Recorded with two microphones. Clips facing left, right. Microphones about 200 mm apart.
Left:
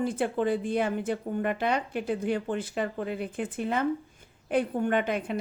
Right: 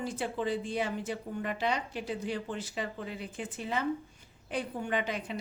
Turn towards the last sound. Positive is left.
turn(degrees=55)  # may be behind; listen again after turning